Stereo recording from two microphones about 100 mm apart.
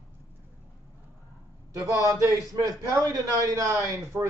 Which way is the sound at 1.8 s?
35° right (ahead or behind).